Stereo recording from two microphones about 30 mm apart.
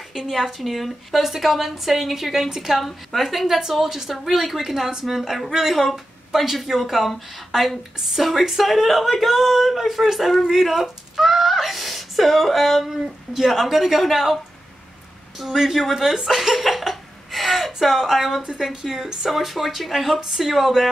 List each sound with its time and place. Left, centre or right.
0.1 s a woman's voice: centre
2.8 s a woman's voice: centre
3.4 s a woman's voice: centre
16.0 s speech: right
16.3 s a woman's voice: centre
16.9 s a sound: centre
18.8 s speech: centre
19.3 s a woman's voice: centre